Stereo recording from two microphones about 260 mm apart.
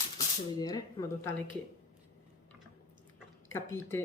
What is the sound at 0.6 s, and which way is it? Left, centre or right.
Speech, centre.